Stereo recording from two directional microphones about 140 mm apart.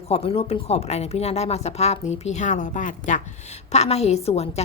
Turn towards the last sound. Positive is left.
turn(degrees=50)  # may be behind; listen again after turning